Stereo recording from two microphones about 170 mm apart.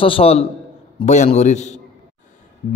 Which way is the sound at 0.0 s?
35° left (ahead or behind).